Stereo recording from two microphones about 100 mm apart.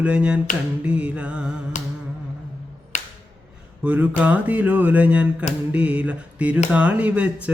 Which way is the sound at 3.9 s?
20° right (ahead or behind).